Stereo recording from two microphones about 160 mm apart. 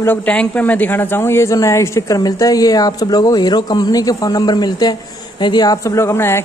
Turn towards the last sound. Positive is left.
turn(degrees=15)  # may be behind; listen again after turning